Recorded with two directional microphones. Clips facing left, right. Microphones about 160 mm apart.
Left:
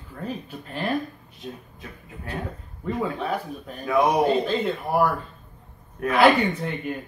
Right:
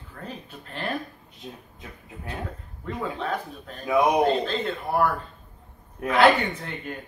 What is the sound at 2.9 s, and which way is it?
A man's voice, 10° left (ahead or behind).